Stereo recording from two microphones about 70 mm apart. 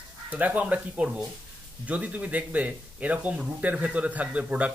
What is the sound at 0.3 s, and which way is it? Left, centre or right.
Speech, right.